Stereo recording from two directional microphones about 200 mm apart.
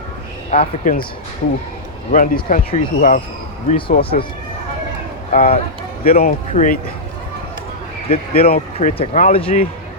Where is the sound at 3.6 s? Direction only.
30° left (ahead or behind).